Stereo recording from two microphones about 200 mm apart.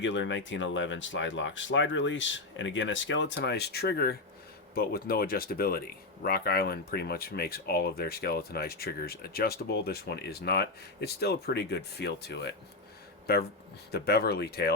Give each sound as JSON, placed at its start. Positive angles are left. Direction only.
{"t": 0.0, "sound": "speech", "side_deg": 70}
{"t": 13.9, "sound": "speech", "side_deg": 50}